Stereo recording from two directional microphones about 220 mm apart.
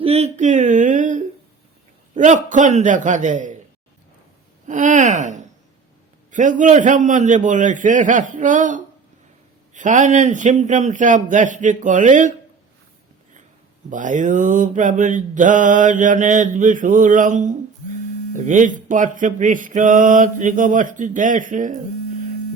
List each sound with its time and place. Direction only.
0.0 s speech: 30° right (ahead or behind)
2.1 s mantra: 35° right (ahead or behind)
4.6 s speech: 35° right (ahead or behind)
6.3 s mantra: 35° right (ahead or behind)
13.9 s mantra: 35° right (ahead or behind)